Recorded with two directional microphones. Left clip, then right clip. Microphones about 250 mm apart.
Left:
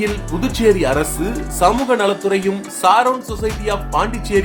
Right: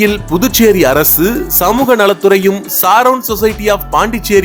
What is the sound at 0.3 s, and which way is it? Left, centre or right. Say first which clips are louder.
Speech: right 5 dB; right.